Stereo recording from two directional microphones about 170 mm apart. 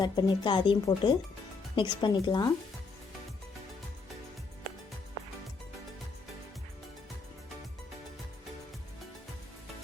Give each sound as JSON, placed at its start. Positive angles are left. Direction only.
{"t": 0.0, "sound": "speech", "side_deg": 25}